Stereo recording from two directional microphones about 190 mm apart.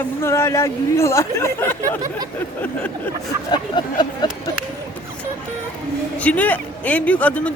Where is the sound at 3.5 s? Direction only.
25° left (ahead or behind).